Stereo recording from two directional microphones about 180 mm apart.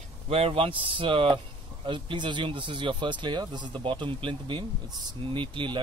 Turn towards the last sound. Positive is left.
turn(degrees=-30)  # may be behind; listen again after turning